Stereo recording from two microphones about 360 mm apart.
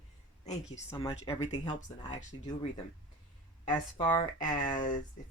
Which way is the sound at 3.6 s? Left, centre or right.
Centre.